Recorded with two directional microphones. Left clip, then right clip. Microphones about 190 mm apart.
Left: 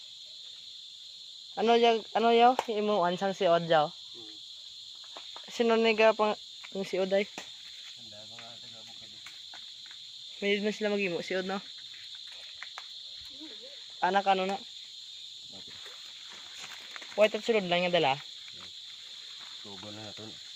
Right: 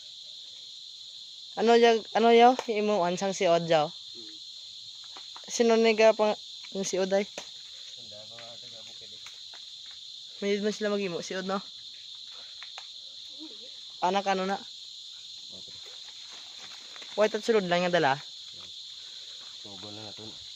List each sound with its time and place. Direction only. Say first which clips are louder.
1.5 s speech: right 3 dB; 30° right (ahead or behind)
5.5 s speech: right 3 dB; 25° right (ahead or behind)
10.6 s speech: right 1 dB; 15° right (ahead or behind)
14.0 s speech: left 1 dB; 25° right (ahead or behind)
17.2 s speech: right 1 dB; 25° right (ahead or behind)